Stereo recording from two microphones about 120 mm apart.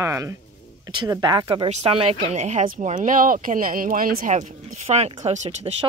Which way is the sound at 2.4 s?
80° right.